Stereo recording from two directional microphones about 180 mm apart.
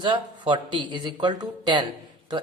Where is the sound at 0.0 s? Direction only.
25° right (ahead or behind).